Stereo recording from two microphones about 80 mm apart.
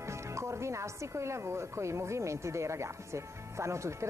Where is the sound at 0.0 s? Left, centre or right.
Right.